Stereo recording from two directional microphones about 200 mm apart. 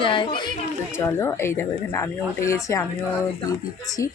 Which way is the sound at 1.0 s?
15° left (ahead or behind).